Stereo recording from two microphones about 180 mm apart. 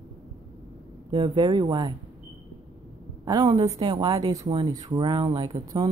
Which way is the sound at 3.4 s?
25° right (ahead or behind).